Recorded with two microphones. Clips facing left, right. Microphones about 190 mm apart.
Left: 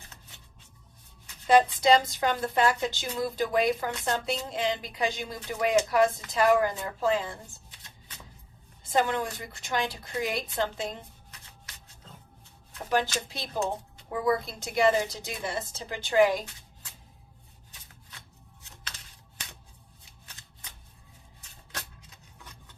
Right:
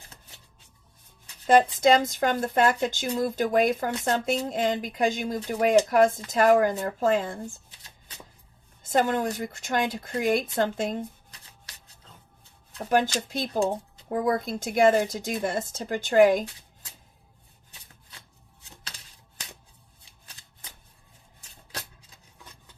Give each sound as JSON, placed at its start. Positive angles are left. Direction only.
{"t": 1.5, "sound": "a woman's voice", "side_deg": -50}
{"t": 8.8, "sound": "a woman's voice", "side_deg": -45}
{"t": 12.9, "sound": "a woman's voice", "side_deg": -50}